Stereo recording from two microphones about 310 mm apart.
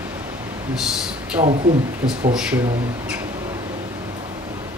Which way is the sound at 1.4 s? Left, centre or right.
Centre.